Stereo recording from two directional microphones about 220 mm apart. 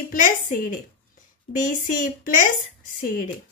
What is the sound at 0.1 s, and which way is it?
Speech, 35° left (ahead or behind).